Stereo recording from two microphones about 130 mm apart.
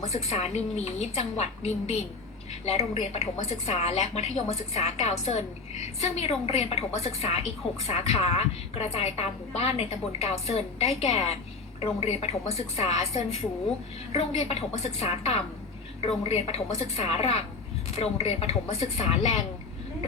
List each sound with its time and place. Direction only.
0.1 s a woman's voice: 55° left (ahead or behind)